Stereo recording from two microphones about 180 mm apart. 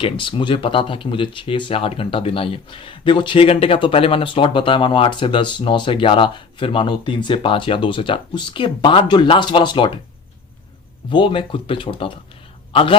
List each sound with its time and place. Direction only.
0.0 s speech: 25° left (ahead or behind)
11.1 s speech: 30° left (ahead or behind)